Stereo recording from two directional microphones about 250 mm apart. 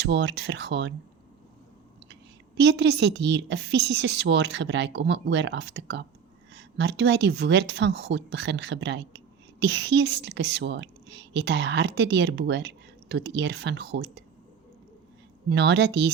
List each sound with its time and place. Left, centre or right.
0.0 s a woman's voice: right
2.6 s a woman's voice: right
15.4 s a woman's voice: right